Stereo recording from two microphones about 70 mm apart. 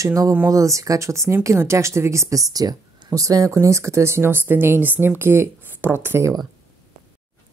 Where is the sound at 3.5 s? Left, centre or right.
Right.